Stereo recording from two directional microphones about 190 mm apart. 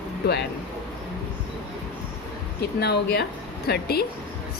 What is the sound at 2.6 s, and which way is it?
A woman's voice, 60° left (ahead or behind).